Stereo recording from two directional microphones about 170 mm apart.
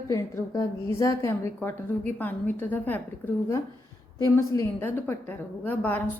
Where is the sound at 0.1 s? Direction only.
15° left (ahead or behind).